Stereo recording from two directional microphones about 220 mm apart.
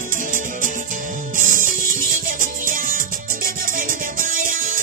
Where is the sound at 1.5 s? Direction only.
40° right (ahead or behind).